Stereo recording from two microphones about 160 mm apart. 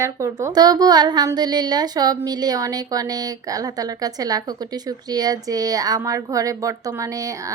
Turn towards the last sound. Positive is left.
turn(degrees=-20)  # may be behind; listen again after turning